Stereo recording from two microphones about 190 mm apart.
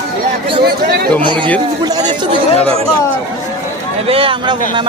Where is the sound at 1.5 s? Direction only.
20° right (ahead or behind).